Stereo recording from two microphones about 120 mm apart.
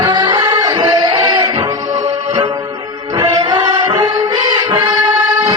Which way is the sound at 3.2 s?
40° right (ahead or behind).